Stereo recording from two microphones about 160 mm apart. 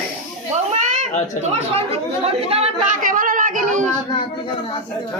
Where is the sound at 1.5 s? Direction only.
40° right (ahead or behind).